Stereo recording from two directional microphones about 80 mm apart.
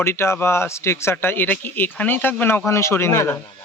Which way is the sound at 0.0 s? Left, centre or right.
Left.